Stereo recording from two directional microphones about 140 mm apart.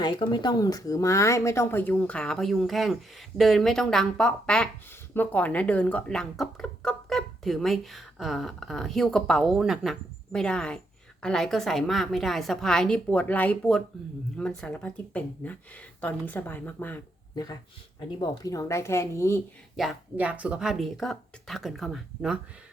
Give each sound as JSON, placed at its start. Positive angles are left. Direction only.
{"t": 0.0, "sound": "speech", "side_deg": 35}
{"t": 17.3, "sound": "speech", "side_deg": 25}
{"t": 19.7, "sound": "speech", "side_deg": 0}